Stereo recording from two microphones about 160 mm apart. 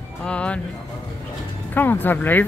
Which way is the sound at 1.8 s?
10° left (ahead or behind).